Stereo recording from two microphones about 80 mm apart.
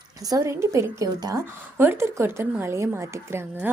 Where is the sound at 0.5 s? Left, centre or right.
Right.